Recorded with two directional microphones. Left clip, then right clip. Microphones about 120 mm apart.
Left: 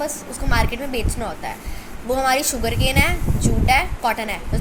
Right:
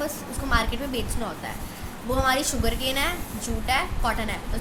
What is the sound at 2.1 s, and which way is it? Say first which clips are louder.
A woman's voice: left 5 dB; 35° left (ahead or behind).